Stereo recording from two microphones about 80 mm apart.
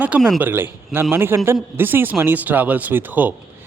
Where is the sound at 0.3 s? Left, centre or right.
Right.